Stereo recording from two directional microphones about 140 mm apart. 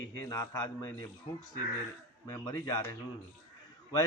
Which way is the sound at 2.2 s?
25° left (ahead or behind).